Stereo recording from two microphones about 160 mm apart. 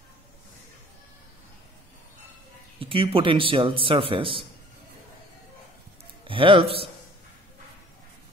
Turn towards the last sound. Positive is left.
turn(degrees=-35)  # may be behind; listen again after turning